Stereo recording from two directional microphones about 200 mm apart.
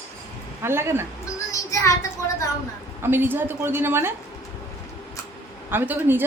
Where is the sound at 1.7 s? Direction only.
15° left (ahead or behind).